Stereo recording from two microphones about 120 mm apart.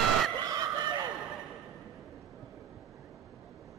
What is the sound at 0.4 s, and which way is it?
Fowl, 35° right (ahead or behind).